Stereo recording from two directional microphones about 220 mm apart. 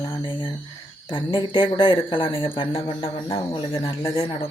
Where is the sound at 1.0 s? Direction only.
20° left (ahead or behind).